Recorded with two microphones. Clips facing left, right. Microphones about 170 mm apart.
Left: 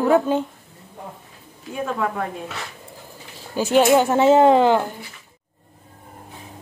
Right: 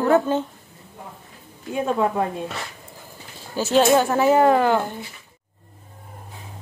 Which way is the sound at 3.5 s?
15° left (ahead or behind).